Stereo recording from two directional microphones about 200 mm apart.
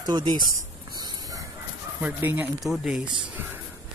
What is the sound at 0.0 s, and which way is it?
Speech, 25° right (ahead or behind).